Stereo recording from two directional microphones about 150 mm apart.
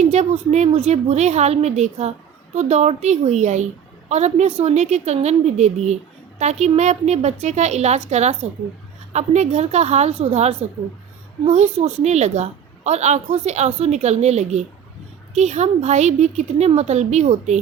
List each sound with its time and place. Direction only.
0.0 s a woman's voice: 50° right (ahead or behind)